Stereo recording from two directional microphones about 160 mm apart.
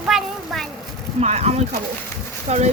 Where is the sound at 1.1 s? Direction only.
40° right (ahead or behind).